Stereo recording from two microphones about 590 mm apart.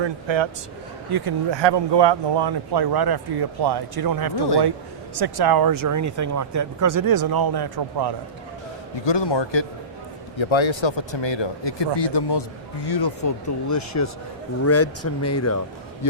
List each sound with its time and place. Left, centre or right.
0.0 s speech: right
9.0 s speech: left